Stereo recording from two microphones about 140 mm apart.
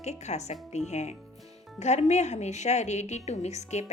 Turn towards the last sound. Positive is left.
turn(degrees=55)  # may be behind; listen again after turning